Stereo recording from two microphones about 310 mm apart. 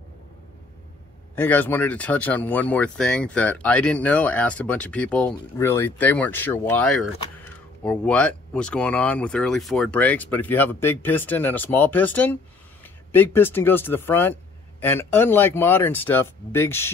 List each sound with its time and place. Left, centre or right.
1.3 s speech: centre